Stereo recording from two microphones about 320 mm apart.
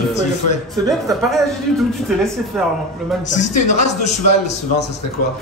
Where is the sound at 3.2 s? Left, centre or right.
Left.